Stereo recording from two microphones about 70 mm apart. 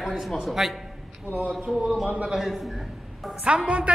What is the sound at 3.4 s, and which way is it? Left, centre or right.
Speech, centre.